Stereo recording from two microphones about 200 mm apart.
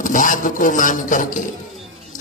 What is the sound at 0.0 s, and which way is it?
A man's voice, 40° left (ahead or behind).